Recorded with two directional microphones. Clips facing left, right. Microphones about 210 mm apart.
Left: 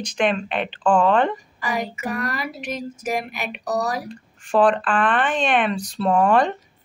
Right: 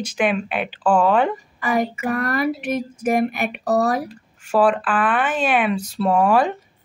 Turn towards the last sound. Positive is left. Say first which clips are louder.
# right 1 dB
turn(degrees=-5)  # may be behind; listen again after turning